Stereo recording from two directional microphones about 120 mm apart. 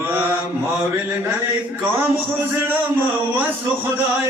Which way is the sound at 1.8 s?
20° right (ahead or behind).